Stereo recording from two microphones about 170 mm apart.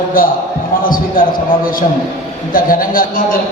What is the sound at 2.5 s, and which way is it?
Speech, 55° left (ahead or behind).